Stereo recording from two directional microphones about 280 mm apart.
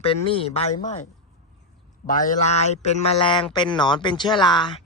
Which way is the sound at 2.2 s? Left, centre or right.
Left.